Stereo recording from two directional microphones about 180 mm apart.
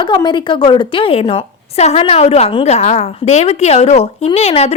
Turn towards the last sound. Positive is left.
turn(degrees=35)  # may be behind; listen again after turning